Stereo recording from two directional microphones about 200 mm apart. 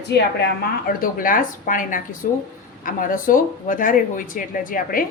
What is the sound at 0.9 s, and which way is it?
Speech, 45° left (ahead or behind).